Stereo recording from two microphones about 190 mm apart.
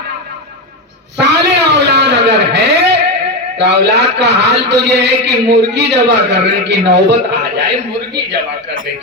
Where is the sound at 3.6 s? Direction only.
65° right (ahead or behind).